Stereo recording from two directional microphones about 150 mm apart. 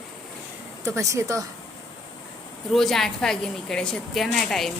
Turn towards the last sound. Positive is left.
turn(degrees=0)  # may be behind; listen again after turning